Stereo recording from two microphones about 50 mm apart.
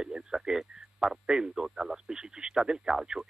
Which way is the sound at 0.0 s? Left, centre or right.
Centre.